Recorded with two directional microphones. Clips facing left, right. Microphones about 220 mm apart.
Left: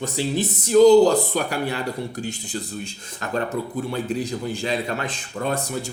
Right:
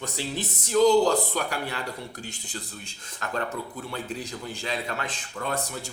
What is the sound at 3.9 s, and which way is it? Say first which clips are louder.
A man's voice: left 8 dB; 10° left (ahead or behind).